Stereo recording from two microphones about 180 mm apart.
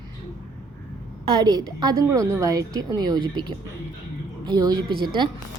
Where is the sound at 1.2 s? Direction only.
25° right (ahead or behind).